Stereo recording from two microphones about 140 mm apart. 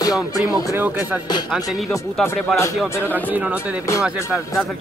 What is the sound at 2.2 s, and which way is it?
Speech, 20° left (ahead or behind).